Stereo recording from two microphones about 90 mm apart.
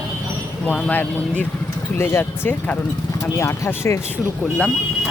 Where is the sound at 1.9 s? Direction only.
25° left (ahead or behind).